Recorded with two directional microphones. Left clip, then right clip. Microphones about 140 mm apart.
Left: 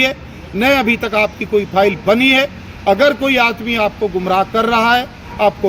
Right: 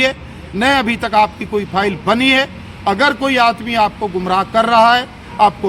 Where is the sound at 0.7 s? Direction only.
30° right (ahead or behind).